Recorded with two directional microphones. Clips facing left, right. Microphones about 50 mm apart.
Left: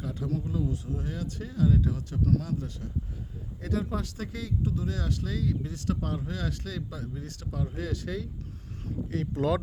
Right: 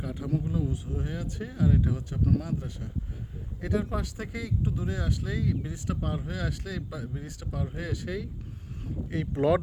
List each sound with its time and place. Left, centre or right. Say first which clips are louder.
0.0 s speech: right 1 dB; right